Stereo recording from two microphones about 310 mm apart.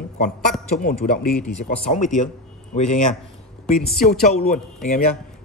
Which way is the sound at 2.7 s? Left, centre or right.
Left.